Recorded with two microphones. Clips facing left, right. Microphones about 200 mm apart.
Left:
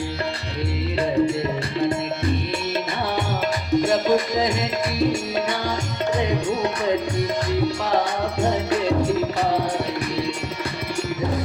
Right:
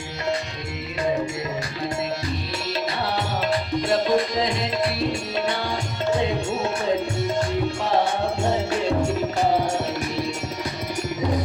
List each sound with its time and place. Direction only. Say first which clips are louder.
3.7 s music: left 5 dB; 45° left (ahead or behind)